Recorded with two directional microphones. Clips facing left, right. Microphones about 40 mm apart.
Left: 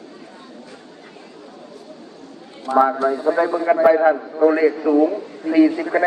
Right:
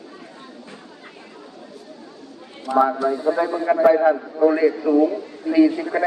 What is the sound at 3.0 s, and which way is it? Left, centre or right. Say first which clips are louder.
A man's voice: left 2 dB; left.